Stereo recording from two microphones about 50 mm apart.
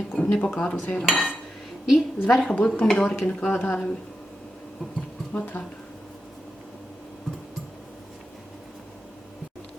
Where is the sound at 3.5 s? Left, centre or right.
Left.